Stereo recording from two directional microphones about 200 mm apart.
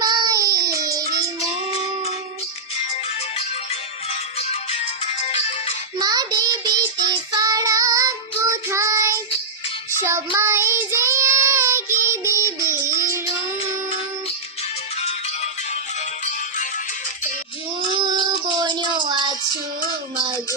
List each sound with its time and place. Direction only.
0.0 s child singing: 20° right (ahead or behind)
0.9 s music: 15° right (ahead or behind)
2.9 s music: 30° left (ahead or behind)
6.0 s child singing: 20° right (ahead or behind)
10.0 s music: 15° right (ahead or behind)
10.3 s child singing: 15° right (ahead or behind)
12.0 s music: 15° right (ahead or behind)
15.0 s music: 35° left (ahead or behind)
17.7 s a sound: 20° right (ahead or behind)
19.0 s music: 25° right (ahead or behind)